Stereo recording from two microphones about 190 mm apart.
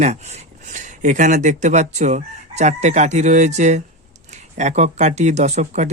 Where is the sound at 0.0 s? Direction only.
35° right (ahead or behind).